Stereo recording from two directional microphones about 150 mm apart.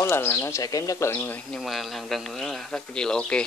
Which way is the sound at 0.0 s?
15° left (ahead or behind).